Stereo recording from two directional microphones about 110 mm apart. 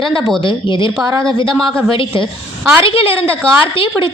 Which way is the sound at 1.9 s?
50° left (ahead or behind).